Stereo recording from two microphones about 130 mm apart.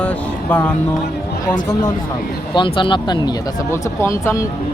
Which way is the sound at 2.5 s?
40° left (ahead or behind).